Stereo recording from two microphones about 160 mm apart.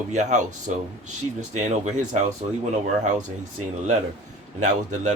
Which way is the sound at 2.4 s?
35° right (ahead or behind).